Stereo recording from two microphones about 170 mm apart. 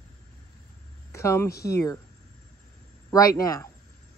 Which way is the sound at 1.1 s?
15° left (ahead or behind).